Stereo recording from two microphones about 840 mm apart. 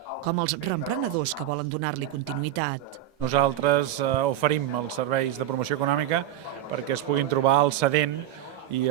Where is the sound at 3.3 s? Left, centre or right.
Right.